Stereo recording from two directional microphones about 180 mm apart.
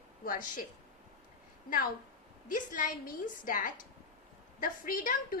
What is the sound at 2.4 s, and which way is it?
A woman's voice, 45° left (ahead or behind).